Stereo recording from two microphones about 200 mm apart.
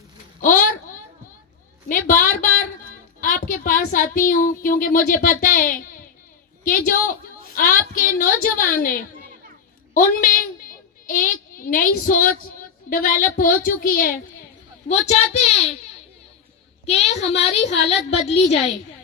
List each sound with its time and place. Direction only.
0.4 s a woman's voice: 45° left (ahead or behind)
1.9 s a sound: 40° left (ahead or behind)
3.2 s a woman's voice: 45° left (ahead or behind)
14.8 s a woman's voice: 35° left (ahead or behind)
16.8 s a woman's voice: 30° left (ahead or behind)